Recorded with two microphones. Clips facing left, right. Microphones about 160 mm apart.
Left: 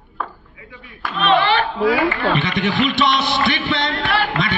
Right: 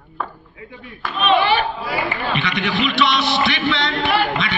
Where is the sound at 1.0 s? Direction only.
5° right (ahead or behind).